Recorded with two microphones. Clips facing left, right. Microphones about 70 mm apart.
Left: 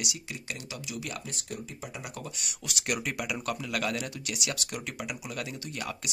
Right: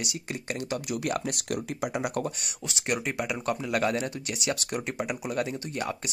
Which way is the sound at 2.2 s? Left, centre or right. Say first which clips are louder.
Right 6 dB; right.